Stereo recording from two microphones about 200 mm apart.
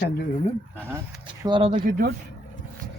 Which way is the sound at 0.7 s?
10° right (ahead or behind).